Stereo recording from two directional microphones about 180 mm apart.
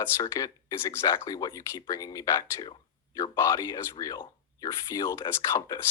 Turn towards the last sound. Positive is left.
turn(degrees=20)  # may be behind; listen again after turning